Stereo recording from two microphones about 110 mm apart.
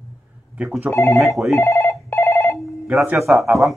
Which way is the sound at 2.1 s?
20° left (ahead or behind).